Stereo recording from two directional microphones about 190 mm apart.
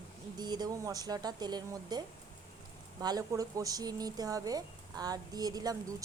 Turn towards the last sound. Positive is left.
turn(degrees=-20)  # may be behind; listen again after turning